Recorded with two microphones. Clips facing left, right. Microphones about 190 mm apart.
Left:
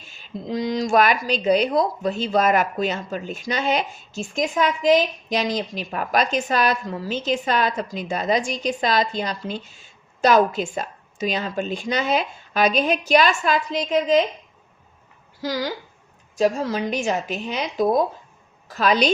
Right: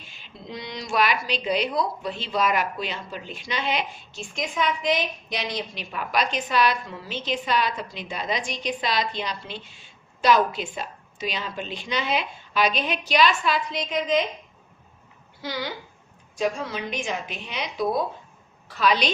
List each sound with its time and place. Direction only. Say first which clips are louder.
0.0 s speech: left 9 dB; 45° left (ahead or behind)
15.4 s speech: left 6 dB; 40° left (ahead or behind)